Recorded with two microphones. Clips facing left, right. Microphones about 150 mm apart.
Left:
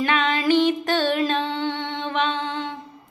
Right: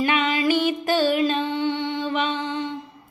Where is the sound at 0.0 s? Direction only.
5° right (ahead or behind).